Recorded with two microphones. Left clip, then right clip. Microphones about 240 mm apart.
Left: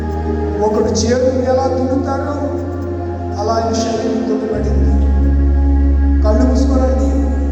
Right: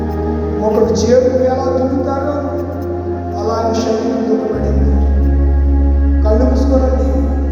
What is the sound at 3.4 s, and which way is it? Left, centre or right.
Music, left.